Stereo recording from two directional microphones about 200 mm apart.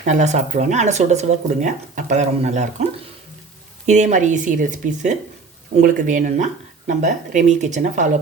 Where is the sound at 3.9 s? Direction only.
35° right (ahead or behind).